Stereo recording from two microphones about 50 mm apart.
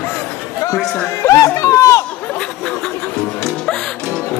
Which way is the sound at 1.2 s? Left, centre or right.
Left.